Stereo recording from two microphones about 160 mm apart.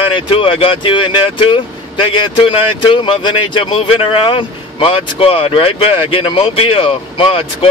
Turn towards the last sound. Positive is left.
turn(degrees=35)  # may be behind; listen again after turning